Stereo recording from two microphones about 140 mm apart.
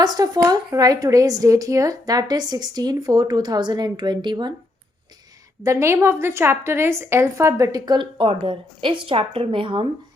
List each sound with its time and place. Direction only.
0.0 s a woman's voice: 30° right (ahead or behind)
5.6 s a woman's voice: 20° right (ahead or behind); by 9.8 s 40° right (ahead or behind)